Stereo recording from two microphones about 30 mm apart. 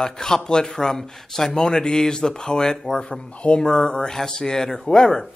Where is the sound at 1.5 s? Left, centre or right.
Left.